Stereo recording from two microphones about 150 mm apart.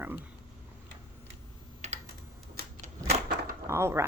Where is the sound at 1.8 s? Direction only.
50° right (ahead or behind).